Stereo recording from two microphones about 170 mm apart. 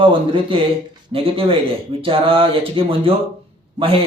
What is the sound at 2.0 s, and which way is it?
A man's voice, 30° right (ahead or behind).